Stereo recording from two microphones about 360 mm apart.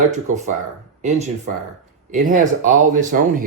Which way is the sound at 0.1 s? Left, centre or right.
Centre.